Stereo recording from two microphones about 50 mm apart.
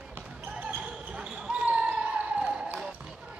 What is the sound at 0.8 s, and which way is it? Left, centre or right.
Basketball bounce, centre.